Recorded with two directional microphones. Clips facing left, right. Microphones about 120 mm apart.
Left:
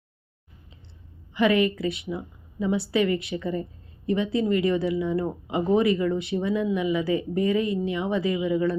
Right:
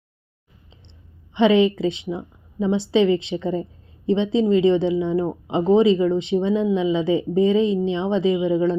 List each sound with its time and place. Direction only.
1.3 s a woman's voice: 25° right (ahead or behind)
1.5 s speech: 90° right
2.0 s a woman's voice: 25° right (ahead or behind)